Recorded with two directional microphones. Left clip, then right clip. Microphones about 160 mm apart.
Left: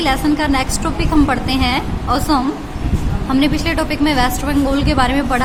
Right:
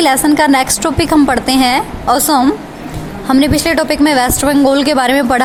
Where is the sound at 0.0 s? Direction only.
60° right (ahead or behind).